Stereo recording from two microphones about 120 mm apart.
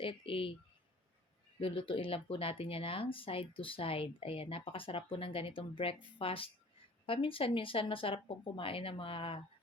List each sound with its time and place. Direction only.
0.0 s speech: 50° left (ahead or behind)
1.6 s speech: 50° left (ahead or behind)